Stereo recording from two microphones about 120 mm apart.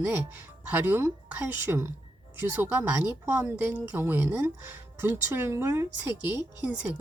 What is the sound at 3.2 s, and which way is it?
A woman's voice, 20° right (ahead or behind).